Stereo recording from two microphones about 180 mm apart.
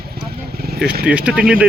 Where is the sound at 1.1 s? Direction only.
5° right (ahead or behind).